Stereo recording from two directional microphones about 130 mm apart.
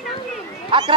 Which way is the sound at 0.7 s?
40° right (ahead or behind).